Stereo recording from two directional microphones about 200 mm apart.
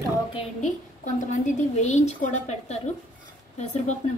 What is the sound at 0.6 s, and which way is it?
A woman's voice, 40° left (ahead or behind).